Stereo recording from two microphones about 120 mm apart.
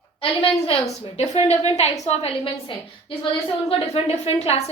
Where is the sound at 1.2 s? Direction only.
65° left (ahead or behind).